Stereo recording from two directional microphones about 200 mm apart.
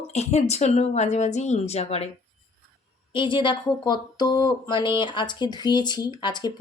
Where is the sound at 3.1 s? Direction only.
25° left (ahead or behind).